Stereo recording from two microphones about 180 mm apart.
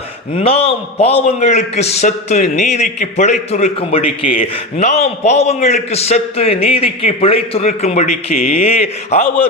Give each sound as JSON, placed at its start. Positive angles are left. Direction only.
{"t": 0.3, "sound": "a man's voice", "side_deg": 35}